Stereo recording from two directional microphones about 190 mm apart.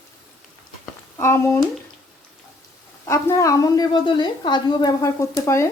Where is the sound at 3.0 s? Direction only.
15° left (ahead or behind).